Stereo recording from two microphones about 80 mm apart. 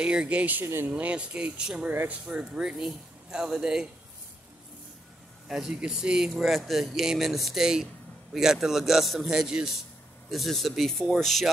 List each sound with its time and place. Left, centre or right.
0.0 s speech: centre
1.9 s speech: right
2.2 s speech: centre
5.5 s speech: centre